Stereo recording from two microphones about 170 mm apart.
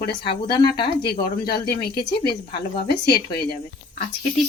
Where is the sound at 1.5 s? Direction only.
70° left (ahead or behind).